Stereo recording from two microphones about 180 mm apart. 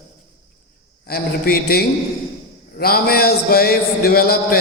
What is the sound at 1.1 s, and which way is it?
A man's voice, 55° left (ahead or behind).